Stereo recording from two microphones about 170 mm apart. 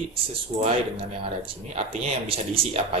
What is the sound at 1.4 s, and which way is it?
Speech, 35° right (ahead or behind).